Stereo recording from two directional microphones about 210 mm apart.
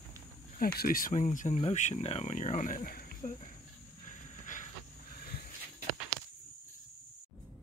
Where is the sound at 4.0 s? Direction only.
40° left (ahead or behind).